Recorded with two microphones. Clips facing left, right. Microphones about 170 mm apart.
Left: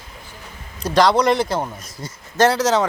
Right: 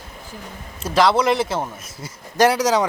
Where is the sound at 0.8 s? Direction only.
5° right (ahead or behind).